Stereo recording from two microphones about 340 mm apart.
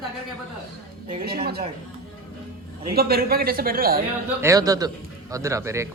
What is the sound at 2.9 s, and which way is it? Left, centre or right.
A man's voice, right.